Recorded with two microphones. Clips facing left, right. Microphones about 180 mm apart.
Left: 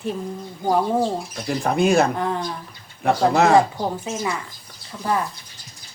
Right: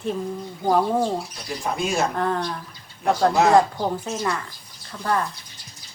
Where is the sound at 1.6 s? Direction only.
60° left (ahead or behind).